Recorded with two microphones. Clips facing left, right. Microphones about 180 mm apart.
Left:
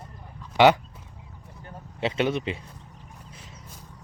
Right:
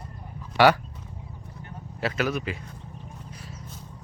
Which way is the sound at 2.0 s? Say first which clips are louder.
Left 2 dB; 25° left (ahead or behind).